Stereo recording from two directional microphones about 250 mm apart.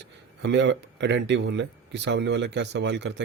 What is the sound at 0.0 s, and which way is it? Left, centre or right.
Speech, right.